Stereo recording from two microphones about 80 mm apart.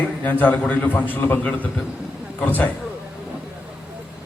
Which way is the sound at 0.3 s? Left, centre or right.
Left.